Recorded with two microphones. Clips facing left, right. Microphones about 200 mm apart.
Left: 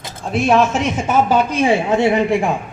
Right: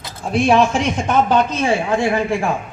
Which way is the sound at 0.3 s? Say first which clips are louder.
Even; 5° left (ahead or behind).